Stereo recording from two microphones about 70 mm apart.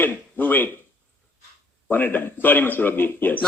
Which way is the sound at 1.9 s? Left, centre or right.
Left.